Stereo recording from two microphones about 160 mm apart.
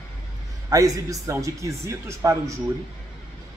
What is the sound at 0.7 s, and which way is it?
A man's voice, 20° right (ahead or behind).